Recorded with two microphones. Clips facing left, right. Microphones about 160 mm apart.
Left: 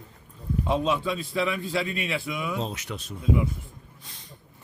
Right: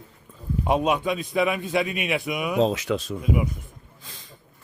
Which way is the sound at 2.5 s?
90° right.